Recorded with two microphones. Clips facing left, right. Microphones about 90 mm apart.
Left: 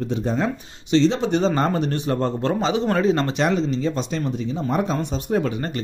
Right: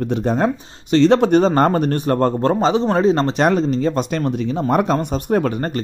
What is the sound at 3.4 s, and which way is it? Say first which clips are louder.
Speech: right 5 dB; 50° right (ahead or behind).